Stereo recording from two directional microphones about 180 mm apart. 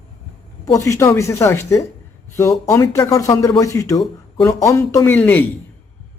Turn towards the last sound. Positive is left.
turn(degrees=10)  # may be behind; listen again after turning